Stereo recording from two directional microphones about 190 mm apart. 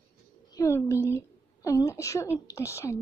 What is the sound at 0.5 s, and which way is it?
A woman's voice, 15° left (ahead or behind).